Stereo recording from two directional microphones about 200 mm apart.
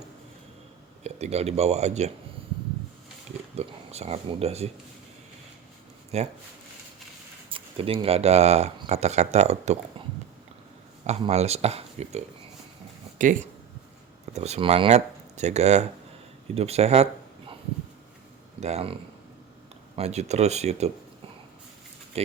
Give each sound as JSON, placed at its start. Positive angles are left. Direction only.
{"t": 1.0, "sound": "speech", "side_deg": -35}
{"t": 3.5, "sound": "speech", "side_deg": -30}
{"t": 6.1, "sound": "speech", "side_deg": -35}
{"t": 7.5, "sound": "speech", "side_deg": -25}
{"t": 11.0, "sound": "speech", "side_deg": -35}
{"t": 18.6, "sound": "speech", "side_deg": -30}
{"t": 20.0, "sound": "speech", "side_deg": -35}
{"t": 22.1, "sound": "speech", "side_deg": -30}